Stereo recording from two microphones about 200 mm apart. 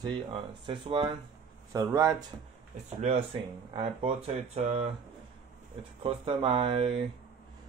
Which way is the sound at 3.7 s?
30° right (ahead or behind).